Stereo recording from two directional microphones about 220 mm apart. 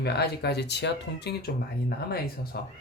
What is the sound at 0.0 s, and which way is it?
Speech, 50° left (ahead or behind).